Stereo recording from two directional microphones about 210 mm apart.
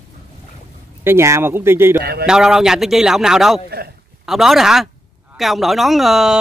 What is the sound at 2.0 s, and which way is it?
Speech, 50° right (ahead or behind).